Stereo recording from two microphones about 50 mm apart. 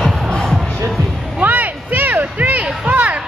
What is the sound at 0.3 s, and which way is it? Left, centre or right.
Music, centre.